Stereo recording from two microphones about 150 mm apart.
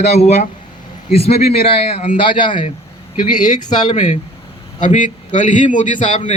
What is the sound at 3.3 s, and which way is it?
A man's voice, 55° left (ahead or behind).